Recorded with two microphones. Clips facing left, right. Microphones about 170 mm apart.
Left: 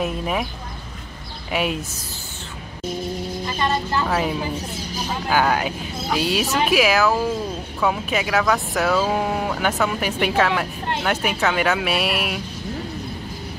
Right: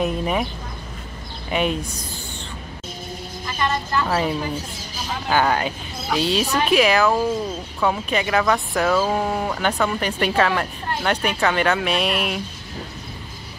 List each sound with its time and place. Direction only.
0.0 s speech: centre (ahead or behind)
1.5 s speech: 5° left (ahead or behind)
3.4 s vehicle: 25° left (ahead or behind)
4.1 s speech: 5° left (ahead or behind)